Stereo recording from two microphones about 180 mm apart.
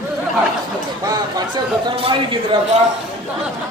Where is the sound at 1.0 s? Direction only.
20° right (ahead or behind).